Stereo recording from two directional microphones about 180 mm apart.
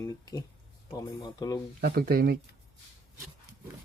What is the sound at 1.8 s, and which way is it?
Speech, 55° right (ahead or behind).